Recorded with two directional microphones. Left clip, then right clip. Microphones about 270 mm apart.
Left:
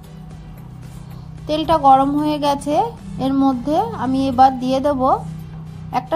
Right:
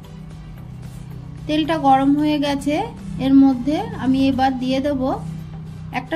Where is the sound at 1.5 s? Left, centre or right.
Left.